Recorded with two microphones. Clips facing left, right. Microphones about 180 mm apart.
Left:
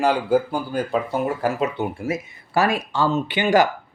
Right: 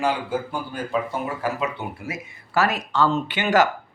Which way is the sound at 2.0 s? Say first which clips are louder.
Left 7 dB; 25° left (ahead or behind).